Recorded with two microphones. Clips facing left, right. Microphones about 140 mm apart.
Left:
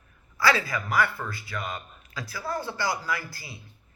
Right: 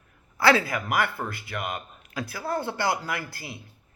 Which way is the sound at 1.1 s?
25° right (ahead or behind).